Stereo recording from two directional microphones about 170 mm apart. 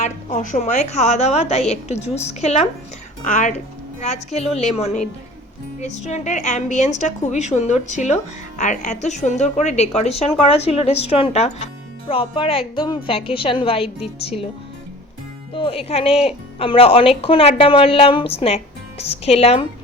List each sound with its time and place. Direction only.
0.0 s a woman's voice: 45° left (ahead or behind)
15.5 s a woman's voice: 35° left (ahead or behind)